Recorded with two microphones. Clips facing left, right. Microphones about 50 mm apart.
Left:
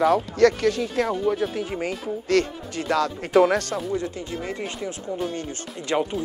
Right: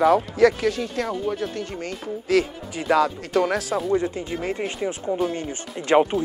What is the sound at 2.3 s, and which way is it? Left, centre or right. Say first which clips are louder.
Speech: right 1 dB; centre.